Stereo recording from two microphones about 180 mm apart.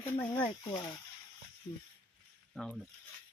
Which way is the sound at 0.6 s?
25° left (ahead or behind).